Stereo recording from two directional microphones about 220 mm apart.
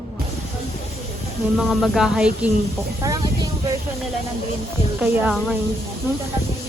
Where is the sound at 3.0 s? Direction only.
15° right (ahead or behind).